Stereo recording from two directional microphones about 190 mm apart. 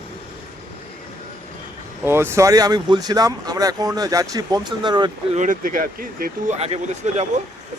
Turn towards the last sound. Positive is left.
turn(degrees=-35)  # may be behind; listen again after turning